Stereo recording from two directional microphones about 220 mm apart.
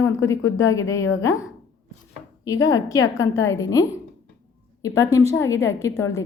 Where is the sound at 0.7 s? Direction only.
15° left (ahead or behind).